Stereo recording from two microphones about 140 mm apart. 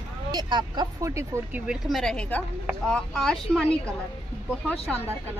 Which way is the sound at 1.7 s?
Centre (ahead or behind).